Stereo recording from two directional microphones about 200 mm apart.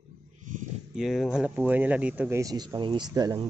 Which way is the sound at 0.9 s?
Centre (ahead or behind).